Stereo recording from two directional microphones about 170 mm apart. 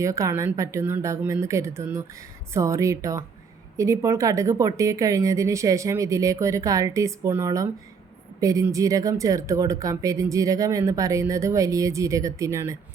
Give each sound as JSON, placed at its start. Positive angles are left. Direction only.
{"t": 0.0, "sound": "a woman's voice", "side_deg": -20}